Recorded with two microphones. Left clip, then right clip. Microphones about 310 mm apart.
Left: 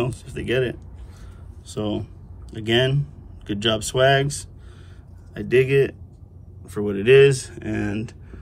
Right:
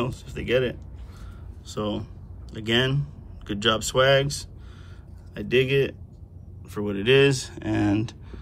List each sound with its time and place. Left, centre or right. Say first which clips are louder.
0.0 s speech: left 3 dB; centre
5.3 s speech: left 4 dB; centre